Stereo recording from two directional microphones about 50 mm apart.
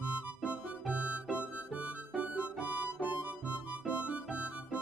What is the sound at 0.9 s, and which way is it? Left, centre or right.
Music, right.